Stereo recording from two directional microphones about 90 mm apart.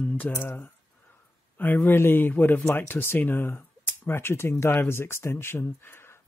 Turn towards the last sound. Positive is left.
turn(degrees=25)  # may be behind; listen again after turning